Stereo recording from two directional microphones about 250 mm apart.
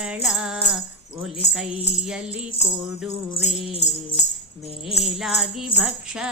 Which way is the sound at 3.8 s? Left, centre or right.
Left.